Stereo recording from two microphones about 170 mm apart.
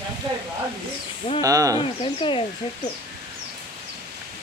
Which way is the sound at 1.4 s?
20° right (ahead or behind).